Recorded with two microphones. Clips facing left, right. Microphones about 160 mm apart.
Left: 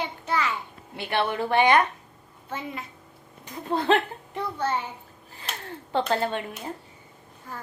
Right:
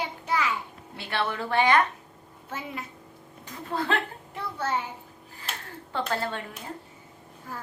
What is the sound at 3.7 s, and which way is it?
Speech, 20° left (ahead or behind).